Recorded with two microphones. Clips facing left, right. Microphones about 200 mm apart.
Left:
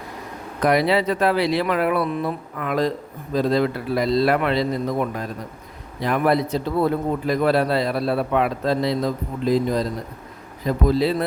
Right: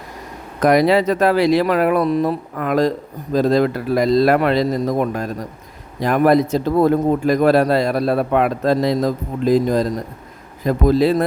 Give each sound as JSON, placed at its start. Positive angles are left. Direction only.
{"t": 0.6, "sound": "a man's voice", "side_deg": -45}